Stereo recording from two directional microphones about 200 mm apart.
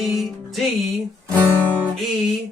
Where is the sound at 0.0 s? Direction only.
Centre (ahead or behind).